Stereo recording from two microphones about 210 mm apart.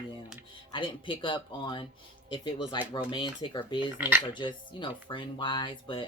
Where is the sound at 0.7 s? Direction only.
25° left (ahead or behind).